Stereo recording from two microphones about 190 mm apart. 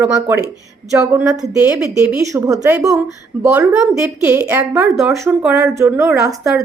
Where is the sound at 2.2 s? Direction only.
15° right (ahead or behind).